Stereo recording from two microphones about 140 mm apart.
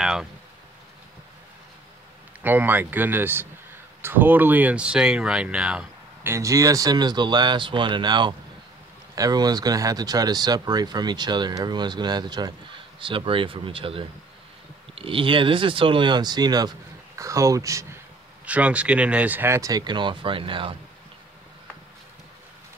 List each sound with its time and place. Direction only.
0.0 s speech: 5° right (ahead or behind)
2.4 s speech: 15° right (ahead or behind)
6.2 s speech: 20° right (ahead or behind)
18.4 s speech: 10° right (ahead or behind); by 20.7 s 35° right (ahead or behind)